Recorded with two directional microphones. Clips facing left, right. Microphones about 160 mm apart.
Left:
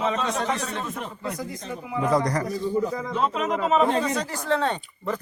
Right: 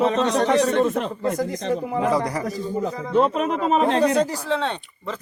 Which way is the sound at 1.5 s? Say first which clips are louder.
Right 10 dB; 90° right.